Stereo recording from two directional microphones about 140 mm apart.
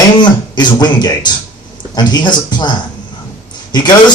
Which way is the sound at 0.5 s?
30° left (ahead or behind).